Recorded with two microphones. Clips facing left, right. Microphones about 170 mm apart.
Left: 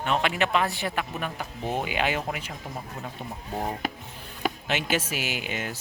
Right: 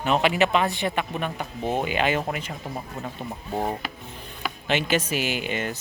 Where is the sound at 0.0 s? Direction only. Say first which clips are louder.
Right 4 dB; 5° right (ahead or behind).